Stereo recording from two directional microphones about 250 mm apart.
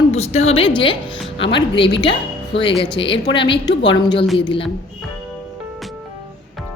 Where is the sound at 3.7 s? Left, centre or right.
Left.